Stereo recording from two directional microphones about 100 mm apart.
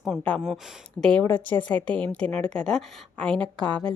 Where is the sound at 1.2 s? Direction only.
20° left (ahead or behind).